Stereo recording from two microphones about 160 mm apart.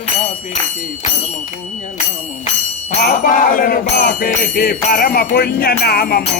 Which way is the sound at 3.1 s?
60° left (ahead or behind).